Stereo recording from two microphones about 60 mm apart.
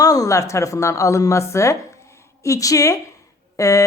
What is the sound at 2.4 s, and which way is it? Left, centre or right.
A woman's voice, left.